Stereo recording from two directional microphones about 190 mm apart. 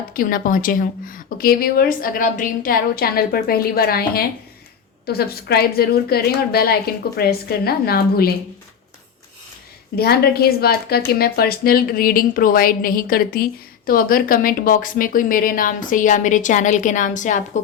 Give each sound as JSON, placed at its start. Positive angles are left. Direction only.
{"t": 0.1, "sound": "a woman's voice", "side_deg": 50}
{"t": 9.9, "sound": "a woman's voice", "side_deg": 55}